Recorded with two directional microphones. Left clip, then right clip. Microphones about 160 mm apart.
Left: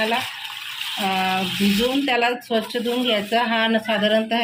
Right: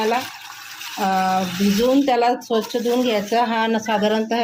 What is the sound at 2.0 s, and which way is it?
Speech, 75° right (ahead or behind).